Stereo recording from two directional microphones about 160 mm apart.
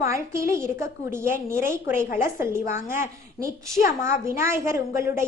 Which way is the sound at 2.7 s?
15° right (ahead or behind).